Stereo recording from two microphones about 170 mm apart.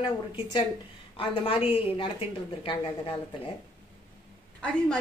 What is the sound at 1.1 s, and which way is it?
A woman's voice, 30° left (ahead or behind).